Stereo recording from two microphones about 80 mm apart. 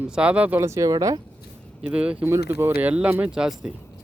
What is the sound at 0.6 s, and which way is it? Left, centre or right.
Speech, right.